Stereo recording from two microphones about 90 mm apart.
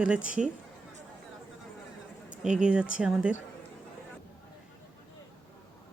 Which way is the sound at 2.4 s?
10° right (ahead or behind).